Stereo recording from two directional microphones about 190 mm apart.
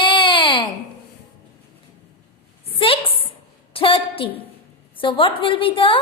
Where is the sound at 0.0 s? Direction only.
25° left (ahead or behind).